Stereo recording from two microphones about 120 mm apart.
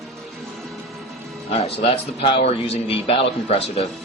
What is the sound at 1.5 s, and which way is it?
A man's voice, 60° left (ahead or behind).